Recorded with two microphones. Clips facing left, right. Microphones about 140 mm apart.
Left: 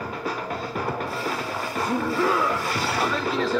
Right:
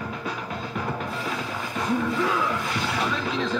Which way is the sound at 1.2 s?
35° left (ahead or behind).